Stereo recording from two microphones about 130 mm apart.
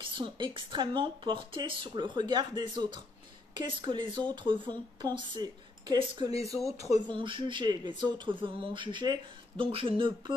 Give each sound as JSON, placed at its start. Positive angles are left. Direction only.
{"t": 0.0, "sound": "speech", "side_deg": -40}
{"t": 7.1, "sound": "speech", "side_deg": -40}